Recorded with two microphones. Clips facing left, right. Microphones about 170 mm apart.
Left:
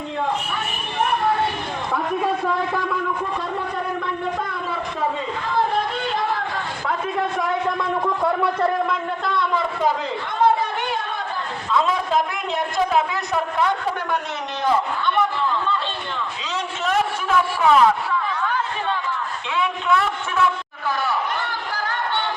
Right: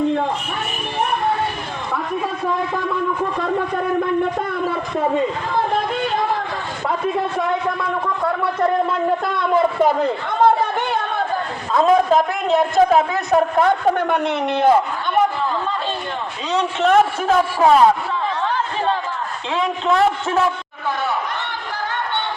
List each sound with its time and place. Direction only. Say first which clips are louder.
9.2 s a man's voice: right 5 dB; 50° right (ahead or behind)
16.5 s a man's voice: right 9 dB; 60° right (ahead or behind)
17.2 s a sound: right 4 dB; 35° right (ahead or behind)
19.5 s a man's voice: right 3 dB; 40° right (ahead or behind)